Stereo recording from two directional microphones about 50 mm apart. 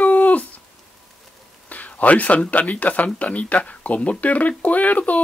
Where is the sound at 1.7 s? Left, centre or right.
Left.